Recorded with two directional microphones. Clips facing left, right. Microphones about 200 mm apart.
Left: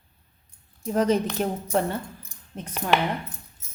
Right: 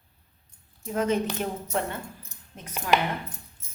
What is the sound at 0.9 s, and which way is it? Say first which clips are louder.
Speech: left 3 dB; 35° left (ahead or behind).